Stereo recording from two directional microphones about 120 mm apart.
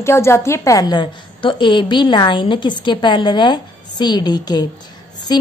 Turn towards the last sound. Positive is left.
turn(degrees=35)  # may be behind; listen again after turning